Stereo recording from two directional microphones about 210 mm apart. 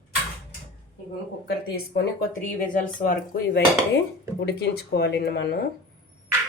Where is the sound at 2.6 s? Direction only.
40° left (ahead or behind).